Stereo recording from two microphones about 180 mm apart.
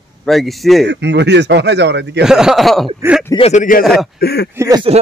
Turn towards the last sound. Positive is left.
turn(degrees=-20)  # may be behind; listen again after turning